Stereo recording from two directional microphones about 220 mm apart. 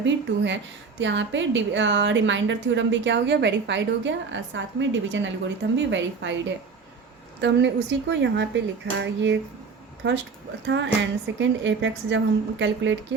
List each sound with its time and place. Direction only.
0.0 s a woman's voice: 55° right (ahead or behind)
7.4 s speech: 55° right (ahead or behind)
10.7 s a woman's voice: 55° right (ahead or behind)